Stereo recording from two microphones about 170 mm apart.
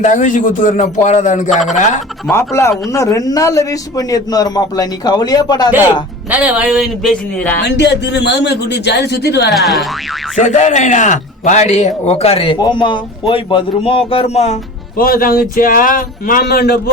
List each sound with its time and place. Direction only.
0.0 s a man's voice: 45° left (ahead or behind)
2.3 s speech: 15° left (ahead or behind)
6.3 s speech: 10° right (ahead or behind); by 7.6 s 10° left (ahead or behind)
7.6 s a man's voice: 85° left
9.5 s speech: centre (ahead or behind)
10.3 s a man's voice: 45° left (ahead or behind)
14.9 s speech: 60° left (ahead or behind)